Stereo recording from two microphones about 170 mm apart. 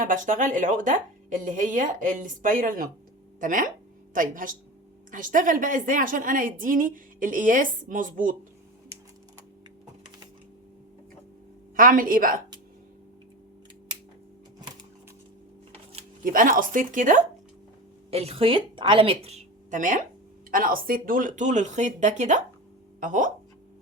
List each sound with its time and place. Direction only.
0.0 s a woman's voice: 50° right (ahead or behind)
11.8 s a woman's voice: 55° right (ahead or behind)
16.2 s a woman's voice: 55° right (ahead or behind)
18.1 s a woman's voice: 35° right (ahead or behind)